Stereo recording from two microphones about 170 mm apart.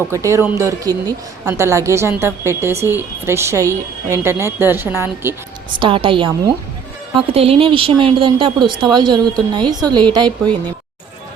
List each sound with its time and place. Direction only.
0.1 s a woman's voice: 15° right (ahead or behind)
5.8 s a woman's voice: 30° right (ahead or behind)